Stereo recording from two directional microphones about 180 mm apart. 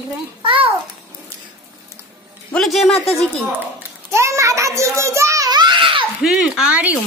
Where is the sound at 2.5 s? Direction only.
Centre (ahead or behind).